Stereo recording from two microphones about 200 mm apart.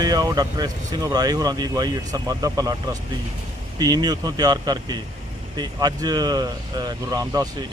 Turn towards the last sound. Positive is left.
turn(degrees=-20)  # may be behind; listen again after turning